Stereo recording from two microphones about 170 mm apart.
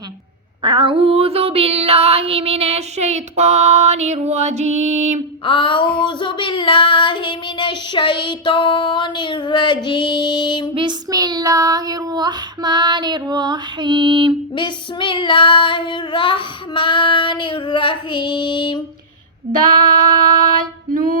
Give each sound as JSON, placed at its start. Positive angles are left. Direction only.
{"t": 0.6, "sound": "a sound", "side_deg": -30}
{"t": 5.5, "sound": "child singing", "side_deg": 30}
{"t": 10.8, "sound": "child singing", "side_deg": -25}
{"t": 14.5, "sound": "child singing", "side_deg": 30}
{"t": 19.5, "sound": "female singing", "side_deg": -55}